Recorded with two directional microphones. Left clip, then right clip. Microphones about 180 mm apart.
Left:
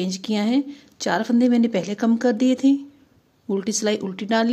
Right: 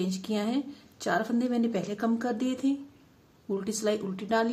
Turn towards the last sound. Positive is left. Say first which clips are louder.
# left 6 dB
turn(degrees=45)  # may be behind; listen again after turning